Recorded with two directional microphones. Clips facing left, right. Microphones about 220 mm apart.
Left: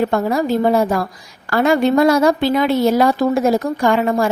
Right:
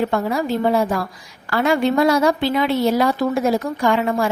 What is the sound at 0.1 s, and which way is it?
Speech, 40° left (ahead or behind).